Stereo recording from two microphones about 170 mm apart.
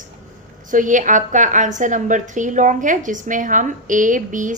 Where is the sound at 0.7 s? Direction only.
50° right (ahead or behind).